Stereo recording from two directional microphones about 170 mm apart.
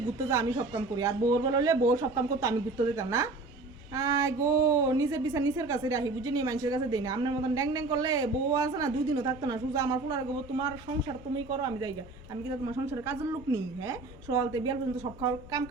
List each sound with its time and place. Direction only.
0.3 s a woman's voice: 20° right (ahead or behind)
12.5 s a woman's voice: 15° right (ahead or behind)